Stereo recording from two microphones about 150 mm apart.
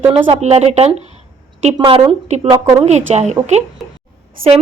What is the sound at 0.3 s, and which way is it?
Speech, 45° right (ahead or behind).